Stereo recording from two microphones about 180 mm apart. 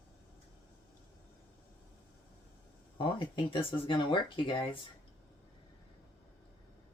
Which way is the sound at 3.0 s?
30° left (ahead or behind).